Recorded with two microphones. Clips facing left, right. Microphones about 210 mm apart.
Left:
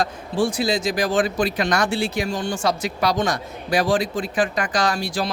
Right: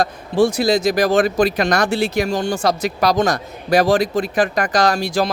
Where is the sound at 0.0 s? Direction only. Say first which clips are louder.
Right 5 dB; 40° right (ahead or behind).